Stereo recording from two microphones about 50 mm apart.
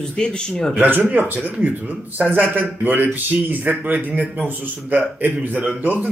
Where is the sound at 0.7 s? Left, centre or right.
Right.